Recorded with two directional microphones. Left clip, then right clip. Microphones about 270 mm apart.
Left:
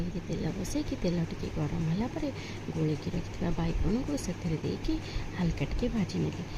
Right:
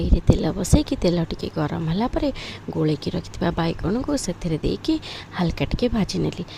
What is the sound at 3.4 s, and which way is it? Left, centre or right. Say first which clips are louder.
Speech: right 12 dB; right.